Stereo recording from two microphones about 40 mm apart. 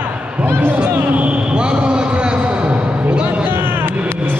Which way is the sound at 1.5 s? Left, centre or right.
Right.